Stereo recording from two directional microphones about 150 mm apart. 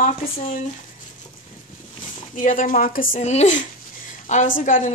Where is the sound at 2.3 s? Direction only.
60° left (ahead or behind).